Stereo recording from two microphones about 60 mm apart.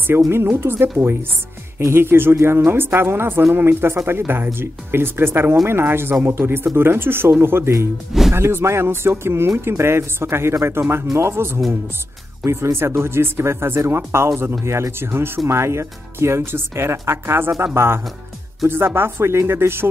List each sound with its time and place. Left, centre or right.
0.3 s a woman's voice: right